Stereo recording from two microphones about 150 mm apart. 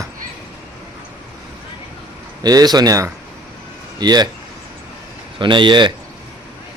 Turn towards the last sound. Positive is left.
turn(degrees=-30)  # may be behind; listen again after turning